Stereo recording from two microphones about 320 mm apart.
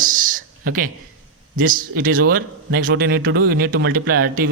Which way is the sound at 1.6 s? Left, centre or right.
Right.